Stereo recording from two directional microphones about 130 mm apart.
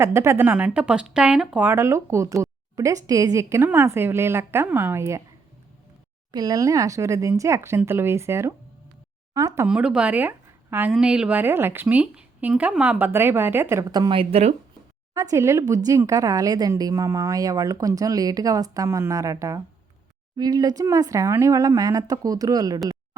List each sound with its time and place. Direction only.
0.0 s a woman's voice: 20° right (ahead or behind)
6.3 s a woman's voice: 30° right (ahead or behind)
9.6 s a woman's voice: 5° right (ahead or behind)
14.1 s speech: 45° right (ahead or behind)
15.1 s a woman's voice: 25° right (ahead or behind)